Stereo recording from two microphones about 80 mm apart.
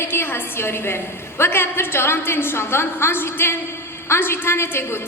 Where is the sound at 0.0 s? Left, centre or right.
Left.